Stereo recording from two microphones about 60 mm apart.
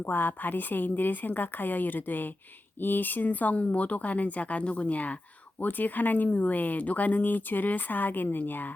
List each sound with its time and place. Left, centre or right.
0.0 s a woman's voice: left